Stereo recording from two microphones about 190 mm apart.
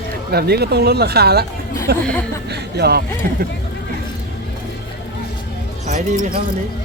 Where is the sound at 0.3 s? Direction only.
55° right (ahead or behind).